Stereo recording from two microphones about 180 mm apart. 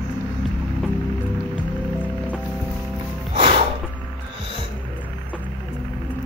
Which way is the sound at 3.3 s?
30° right (ahead or behind).